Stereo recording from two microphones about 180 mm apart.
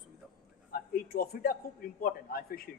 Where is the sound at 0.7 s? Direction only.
55° left (ahead or behind).